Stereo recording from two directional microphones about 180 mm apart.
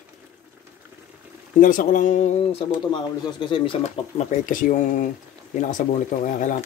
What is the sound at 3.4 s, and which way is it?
Speech, 30° left (ahead or behind).